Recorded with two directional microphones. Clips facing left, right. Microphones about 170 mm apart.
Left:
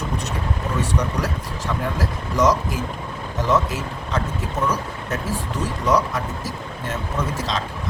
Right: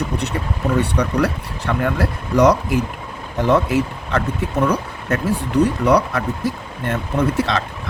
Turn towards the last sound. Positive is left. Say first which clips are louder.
# right 6 dB
turn(degrees=-60)  # may be behind; listen again after turning